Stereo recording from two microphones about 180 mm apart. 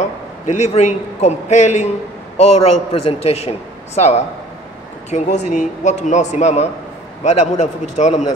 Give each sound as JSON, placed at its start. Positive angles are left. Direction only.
{"t": 0.0, "sound": "a man's voice", "side_deg": 40}